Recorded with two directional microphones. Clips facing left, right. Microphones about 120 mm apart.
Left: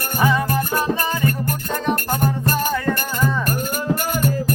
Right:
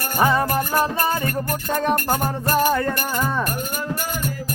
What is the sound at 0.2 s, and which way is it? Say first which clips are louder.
Music: even; 35° right (ahead or behind).